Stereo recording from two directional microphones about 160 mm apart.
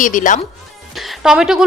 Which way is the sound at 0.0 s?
55° left (ahead or behind).